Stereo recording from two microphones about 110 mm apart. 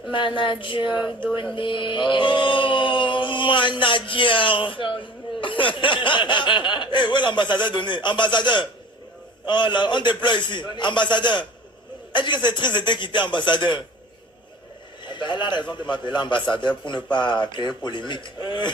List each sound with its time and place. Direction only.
0.1 s chant: 45° left (ahead or behind)
15.0 s chant: 45° left (ahead or behind)